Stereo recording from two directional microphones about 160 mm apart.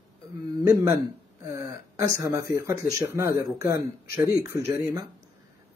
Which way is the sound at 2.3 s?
20° right (ahead or behind).